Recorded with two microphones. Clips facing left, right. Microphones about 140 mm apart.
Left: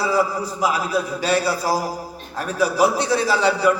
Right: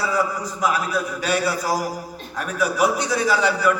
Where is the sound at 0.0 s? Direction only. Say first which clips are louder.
Left 3 dB; 30° left (ahead or behind).